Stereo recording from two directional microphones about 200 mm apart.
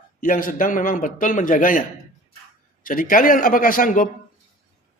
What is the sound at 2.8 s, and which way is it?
A man's voice, 45° left (ahead or behind).